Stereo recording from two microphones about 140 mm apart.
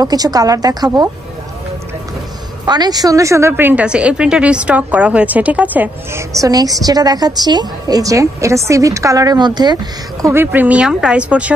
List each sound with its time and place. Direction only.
0.0 s a woman's voice: 25° right (ahead or behind)
2.6 s a woman's voice: 30° right (ahead or behind); by 6.2 s 10° right (ahead or behind)
6.4 s a woman's voice: 25° right (ahead or behind)
10.2 s a woman's voice: 15° right (ahead or behind)